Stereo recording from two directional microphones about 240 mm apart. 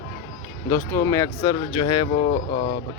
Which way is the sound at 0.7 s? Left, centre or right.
Centre.